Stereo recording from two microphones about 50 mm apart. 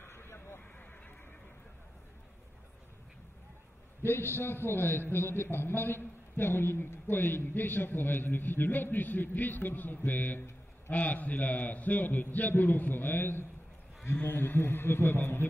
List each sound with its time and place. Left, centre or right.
0.0 s vehicle: left
4.0 s a man's voice: left